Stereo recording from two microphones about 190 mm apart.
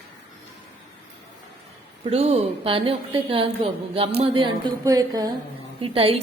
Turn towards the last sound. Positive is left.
turn(degrees=-30)  # may be behind; listen again after turning